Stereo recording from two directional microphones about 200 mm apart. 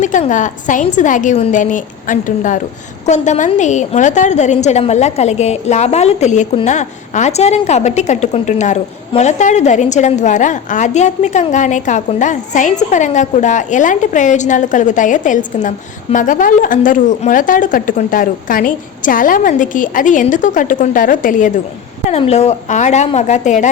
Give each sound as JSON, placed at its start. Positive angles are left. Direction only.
{"t": 0.0, "sound": "a woman's voice", "side_deg": 40}